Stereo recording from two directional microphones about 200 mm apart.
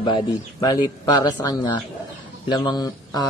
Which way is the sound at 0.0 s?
20° left (ahead or behind).